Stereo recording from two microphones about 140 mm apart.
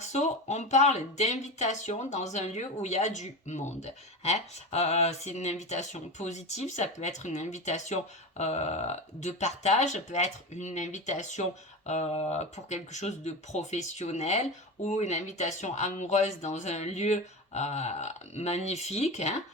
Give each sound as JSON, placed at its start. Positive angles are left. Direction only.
{"t": 0.0, "sound": "speech", "side_deg": 55}